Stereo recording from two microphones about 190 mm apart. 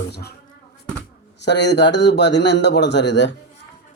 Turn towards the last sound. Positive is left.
turn(degrees=65)  # may be behind; listen again after turning